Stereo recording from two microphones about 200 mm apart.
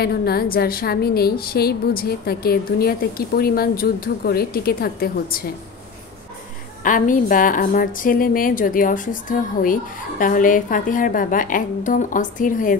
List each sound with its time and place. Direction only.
0.0 s a woman's voice: 50° left (ahead or behind)
6.8 s a woman's voice: 40° left (ahead or behind)